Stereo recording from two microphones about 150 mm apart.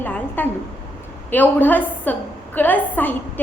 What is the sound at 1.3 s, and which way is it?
A woman's voice, 15° left (ahead or behind).